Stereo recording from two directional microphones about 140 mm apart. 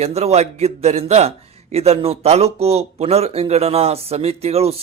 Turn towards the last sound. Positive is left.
turn(degrees=-45)  # may be behind; listen again after turning